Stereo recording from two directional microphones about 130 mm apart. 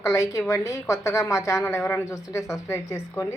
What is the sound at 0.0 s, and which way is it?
A woman's voice, 25° left (ahead or behind).